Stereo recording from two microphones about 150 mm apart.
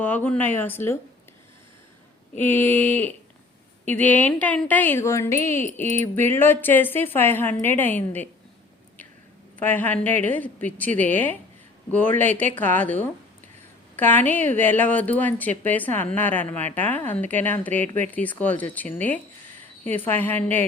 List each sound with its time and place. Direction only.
0.0 s speech: 10° left (ahead or behind)
2.4 s speech: 10° left (ahead or behind)
9.6 s speech: 10° left (ahead or behind)